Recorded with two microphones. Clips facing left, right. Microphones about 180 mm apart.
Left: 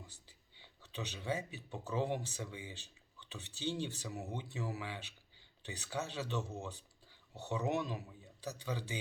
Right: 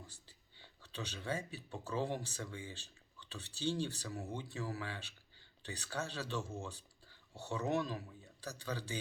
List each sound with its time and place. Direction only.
0.1 s speech: 15° left (ahead or behind)